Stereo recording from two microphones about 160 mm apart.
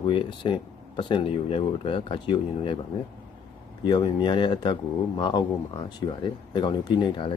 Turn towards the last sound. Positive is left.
turn(degrees=30)  # may be behind; listen again after turning